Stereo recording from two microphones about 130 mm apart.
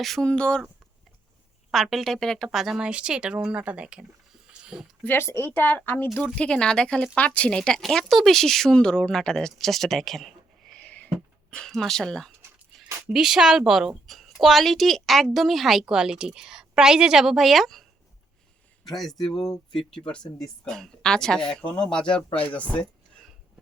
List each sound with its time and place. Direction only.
0.0 s speech: 5° left (ahead or behind)
1.7 s a woman's voice: centre (ahead or behind)
5.0 s a woman's voice: 20° left (ahead or behind); by 17.8 s centre (ahead or behind)
18.9 s a woman's voice: centre (ahead or behind)